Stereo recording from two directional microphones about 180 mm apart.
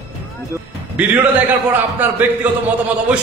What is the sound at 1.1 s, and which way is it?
A man's voice, 10° right (ahead or behind).